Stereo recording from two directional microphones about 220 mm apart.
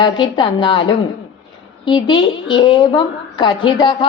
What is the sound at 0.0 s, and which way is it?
A woman's voice, 20° left (ahead or behind).